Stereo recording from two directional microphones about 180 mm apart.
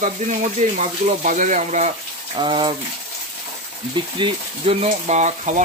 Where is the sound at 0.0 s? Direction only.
40° right (ahead or behind).